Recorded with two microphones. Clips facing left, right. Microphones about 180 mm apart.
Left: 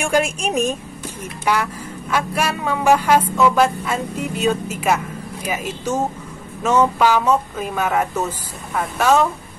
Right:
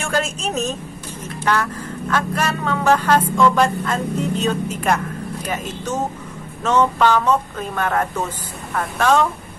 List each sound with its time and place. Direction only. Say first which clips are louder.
0.0 s speech: left 3 dB; 15° left (ahead or behind)